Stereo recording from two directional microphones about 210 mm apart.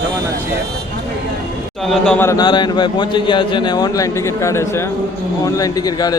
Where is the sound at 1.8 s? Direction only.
Centre (ahead or behind).